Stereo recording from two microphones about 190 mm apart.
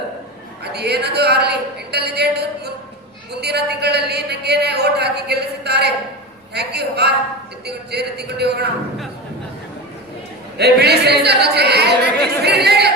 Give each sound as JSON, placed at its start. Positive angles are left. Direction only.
{"t": 0.6, "sound": "a man's voice", "side_deg": -60}
{"t": 10.6, "sound": "speech", "side_deg": -60}